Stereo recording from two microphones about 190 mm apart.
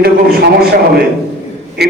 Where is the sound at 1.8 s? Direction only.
60° right (ahead or behind).